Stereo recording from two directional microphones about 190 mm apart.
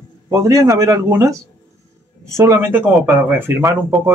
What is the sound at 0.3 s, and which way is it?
Speech, 15° right (ahead or behind).